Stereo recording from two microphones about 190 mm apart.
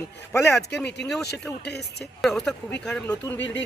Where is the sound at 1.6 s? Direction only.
60° left (ahead or behind).